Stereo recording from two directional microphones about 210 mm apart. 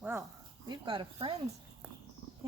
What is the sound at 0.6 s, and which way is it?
Speech, 20° right (ahead or behind).